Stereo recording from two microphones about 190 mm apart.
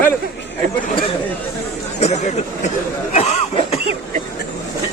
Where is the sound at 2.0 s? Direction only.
35° left (ahead or behind).